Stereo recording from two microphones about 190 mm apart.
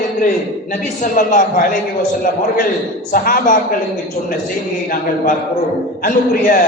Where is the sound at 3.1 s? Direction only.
50° left (ahead or behind).